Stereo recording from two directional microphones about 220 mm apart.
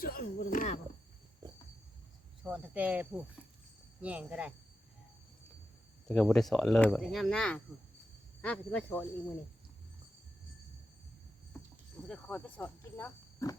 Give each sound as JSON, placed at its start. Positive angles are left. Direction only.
{"t": 0.0, "sound": "speech", "side_deg": 40}
{"t": 2.4, "sound": "speech", "side_deg": -5}
{"t": 6.1, "sound": "speech", "side_deg": 0}
{"t": 12.0, "sound": "speech", "side_deg": 5}